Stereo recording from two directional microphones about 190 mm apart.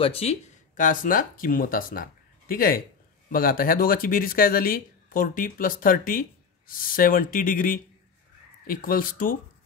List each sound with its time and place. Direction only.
0.0 s speech: 30° left (ahead or behind); by 9.4 s 50° left (ahead or behind)